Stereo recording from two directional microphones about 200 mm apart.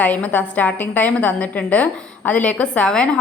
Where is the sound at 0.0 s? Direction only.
10° left (ahead or behind).